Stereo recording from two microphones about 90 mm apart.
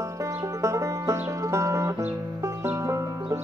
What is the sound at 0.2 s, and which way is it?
Music, 35° right (ahead or behind).